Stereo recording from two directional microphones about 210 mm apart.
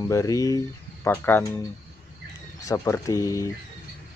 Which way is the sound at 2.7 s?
15° left (ahead or behind).